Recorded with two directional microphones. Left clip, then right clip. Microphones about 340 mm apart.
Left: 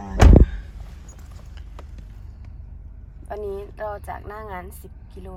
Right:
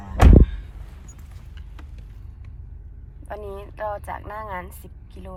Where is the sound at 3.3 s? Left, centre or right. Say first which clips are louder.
Left 4 dB; centre.